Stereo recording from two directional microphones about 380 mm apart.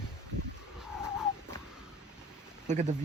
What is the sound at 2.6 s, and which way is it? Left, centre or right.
Speech, centre.